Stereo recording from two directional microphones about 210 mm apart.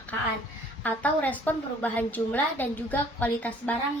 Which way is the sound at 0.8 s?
10° left (ahead or behind).